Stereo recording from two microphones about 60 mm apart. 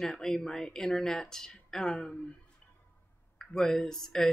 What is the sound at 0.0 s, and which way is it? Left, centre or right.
Speech, centre.